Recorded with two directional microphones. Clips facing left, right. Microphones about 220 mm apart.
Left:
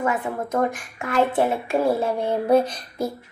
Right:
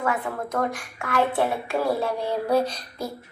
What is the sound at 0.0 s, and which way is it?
Speech, 20° left (ahead or behind).